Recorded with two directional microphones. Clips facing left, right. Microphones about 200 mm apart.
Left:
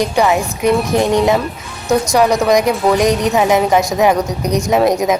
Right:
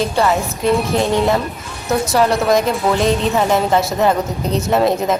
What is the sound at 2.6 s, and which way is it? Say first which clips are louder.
Speech: left 3 dB; 15° left (ahead or behind).